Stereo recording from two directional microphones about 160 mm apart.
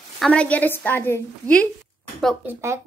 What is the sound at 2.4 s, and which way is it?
Speech, 15° right (ahead or behind).